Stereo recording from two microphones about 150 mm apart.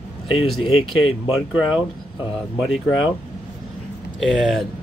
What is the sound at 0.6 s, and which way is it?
Speech, 35° left (ahead or behind).